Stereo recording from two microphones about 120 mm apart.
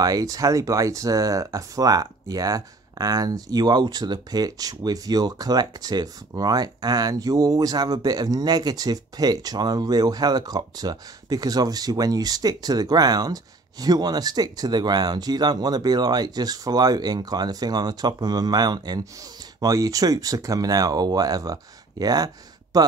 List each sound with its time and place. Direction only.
0.0 s speech: 30° right (ahead or behind)